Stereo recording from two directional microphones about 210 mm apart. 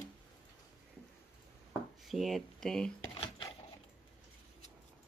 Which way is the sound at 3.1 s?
25° left (ahead or behind).